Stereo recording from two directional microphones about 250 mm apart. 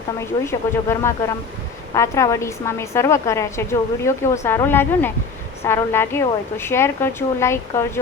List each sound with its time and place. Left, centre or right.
0.4 s a woman's voice: centre